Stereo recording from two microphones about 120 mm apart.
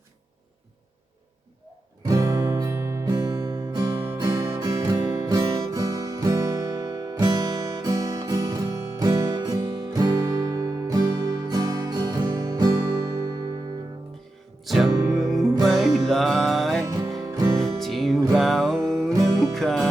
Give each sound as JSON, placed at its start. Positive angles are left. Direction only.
{"t": 2.0, "sound": "music", "side_deg": -30}
{"t": 3.1, "sound": "music", "side_deg": -35}
{"t": 3.9, "sound": "music", "side_deg": -20}
{"t": 14.6, "sound": "music", "side_deg": 0}
{"t": 15.0, "sound": "music", "side_deg": -30}
{"t": 15.6, "sound": "music", "side_deg": 0}
{"t": 16.8, "sound": "music", "side_deg": -30}
{"t": 17.6, "sound": "music", "side_deg": 0}